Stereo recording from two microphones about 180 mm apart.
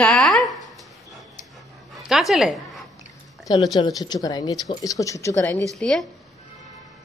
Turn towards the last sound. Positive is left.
turn(degrees=5)  # may be behind; listen again after turning